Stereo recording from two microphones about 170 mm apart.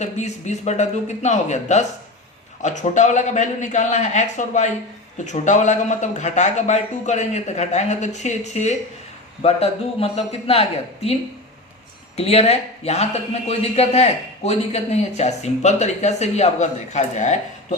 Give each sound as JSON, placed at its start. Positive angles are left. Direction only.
{"t": 0.0, "sound": "a man's voice", "side_deg": 40}